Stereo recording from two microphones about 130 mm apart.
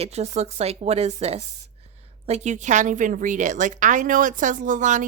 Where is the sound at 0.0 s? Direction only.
55° right (ahead or behind).